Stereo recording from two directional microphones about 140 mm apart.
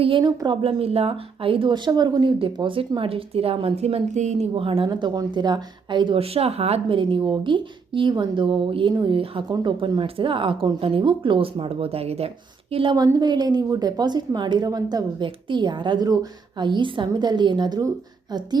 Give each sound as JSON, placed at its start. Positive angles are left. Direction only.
{"t": 0.0, "sound": "a woman's voice", "side_deg": -35}
{"t": 4.5, "sound": "a woman's voice", "side_deg": -40}
{"t": 12.7, "sound": "a woman's voice", "side_deg": -35}